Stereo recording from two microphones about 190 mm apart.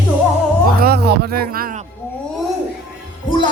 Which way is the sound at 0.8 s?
55° right (ahead or behind).